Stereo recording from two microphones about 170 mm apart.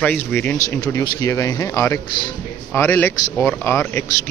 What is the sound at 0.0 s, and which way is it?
Speech, 10° left (ahead or behind).